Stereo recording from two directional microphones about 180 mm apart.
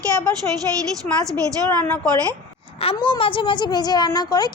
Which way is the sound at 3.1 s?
30° left (ahead or behind).